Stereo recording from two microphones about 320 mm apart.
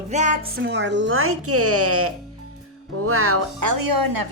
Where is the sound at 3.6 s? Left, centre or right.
Right.